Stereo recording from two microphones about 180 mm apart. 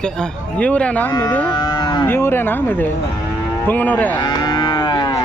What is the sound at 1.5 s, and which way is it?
Moo, 25° left (ahead or behind).